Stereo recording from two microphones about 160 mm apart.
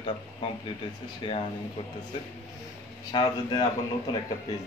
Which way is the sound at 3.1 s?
30° left (ahead or behind).